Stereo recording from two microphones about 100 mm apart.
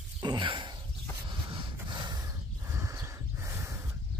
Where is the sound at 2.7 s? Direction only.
30° right (ahead or behind).